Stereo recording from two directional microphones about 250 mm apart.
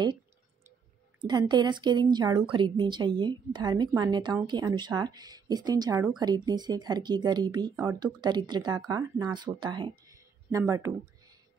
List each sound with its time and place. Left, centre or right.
1.2 s a woman's voice: centre